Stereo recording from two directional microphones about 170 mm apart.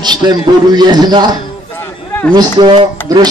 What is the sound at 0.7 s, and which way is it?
Speech, 25° right (ahead or behind).